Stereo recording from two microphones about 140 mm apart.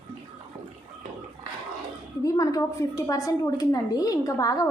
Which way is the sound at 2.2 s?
25° left (ahead or behind).